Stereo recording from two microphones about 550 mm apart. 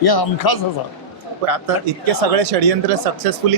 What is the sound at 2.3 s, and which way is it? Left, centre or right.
Speech, right.